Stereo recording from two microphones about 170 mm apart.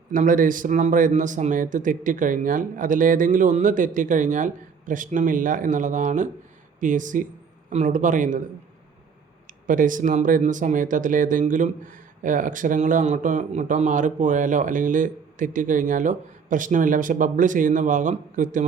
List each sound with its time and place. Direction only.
0.1 s speech: 50° right (ahead or behind)
9.5 s speech: 50° right (ahead or behind)